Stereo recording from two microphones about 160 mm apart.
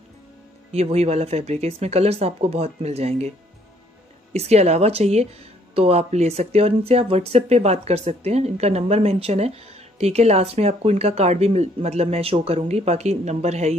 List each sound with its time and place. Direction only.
0.7 s speech: 40° right (ahead or behind)